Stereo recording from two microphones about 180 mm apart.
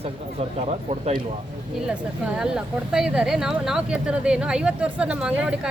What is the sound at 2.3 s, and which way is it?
A woman's voice, 5° right (ahead or behind).